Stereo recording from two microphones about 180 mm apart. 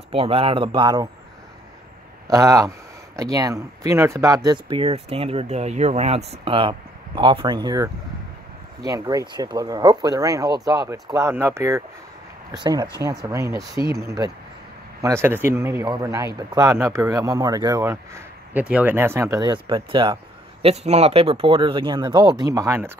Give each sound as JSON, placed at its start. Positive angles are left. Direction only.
{"t": 0.1, "sound": "speech", "side_deg": -30}
{"t": 2.2, "sound": "speech", "side_deg": -20}
{"t": 13.0, "sound": "speech", "side_deg": -20}
{"t": 20.6, "sound": "speech", "side_deg": -35}